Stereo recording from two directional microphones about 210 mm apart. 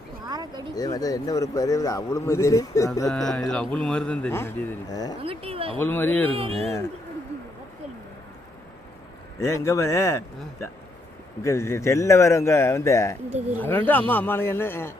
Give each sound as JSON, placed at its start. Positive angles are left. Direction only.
{"t": 0.3, "sound": "a sound", "side_deg": -20}
{"t": 0.8, "sound": "a man's voice", "side_deg": 15}
{"t": 3.1, "sound": "a man's voice", "side_deg": 0}
{"t": 5.2, "sound": "speech", "side_deg": -25}
{"t": 5.8, "sound": "a man's voice", "side_deg": 10}
{"t": 6.3, "sound": "speech", "side_deg": -25}
{"t": 9.4, "sound": "a man's voice", "side_deg": 15}